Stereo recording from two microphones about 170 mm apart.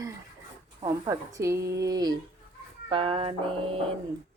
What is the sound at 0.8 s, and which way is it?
Speech, 20° right (ahead or behind).